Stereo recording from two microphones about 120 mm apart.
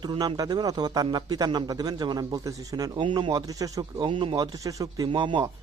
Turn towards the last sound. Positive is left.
turn(degrees=-40)  # may be behind; listen again after turning